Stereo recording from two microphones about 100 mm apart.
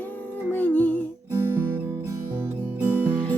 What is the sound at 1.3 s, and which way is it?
Guitar, 25° right (ahead or behind).